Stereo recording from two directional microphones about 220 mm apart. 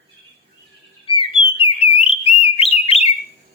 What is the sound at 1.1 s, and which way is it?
Whistle, 25° left (ahead or behind).